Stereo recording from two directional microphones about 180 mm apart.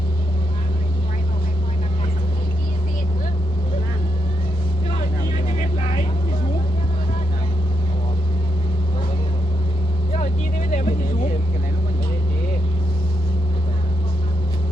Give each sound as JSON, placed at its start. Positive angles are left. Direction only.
{"t": 10.7, "sound": "vehicle", "side_deg": 40}